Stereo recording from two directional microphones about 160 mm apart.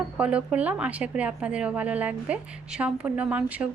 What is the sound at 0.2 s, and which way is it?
A woman's voice, 10° right (ahead or behind).